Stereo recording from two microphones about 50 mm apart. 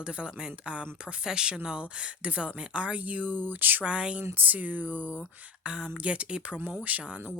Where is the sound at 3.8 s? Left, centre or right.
Right.